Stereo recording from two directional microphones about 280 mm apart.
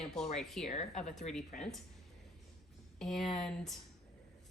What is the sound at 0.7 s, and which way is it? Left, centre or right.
Speech, left.